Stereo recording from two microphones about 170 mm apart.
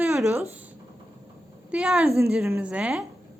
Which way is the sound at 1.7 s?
5° right (ahead or behind).